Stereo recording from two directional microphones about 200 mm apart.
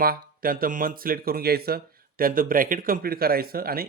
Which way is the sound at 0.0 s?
45° right (ahead or behind).